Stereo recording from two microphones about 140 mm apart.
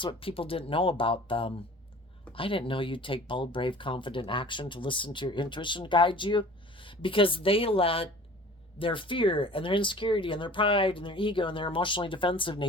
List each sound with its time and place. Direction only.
0.0 s speech: 40° left (ahead or behind)